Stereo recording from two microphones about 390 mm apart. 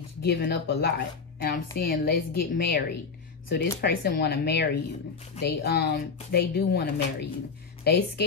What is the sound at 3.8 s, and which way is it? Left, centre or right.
Speech, left.